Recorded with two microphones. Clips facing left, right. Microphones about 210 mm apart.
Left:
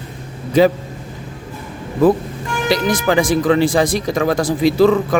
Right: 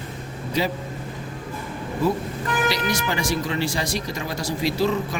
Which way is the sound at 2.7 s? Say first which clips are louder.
Left 11 dB; 50° left (ahead or behind).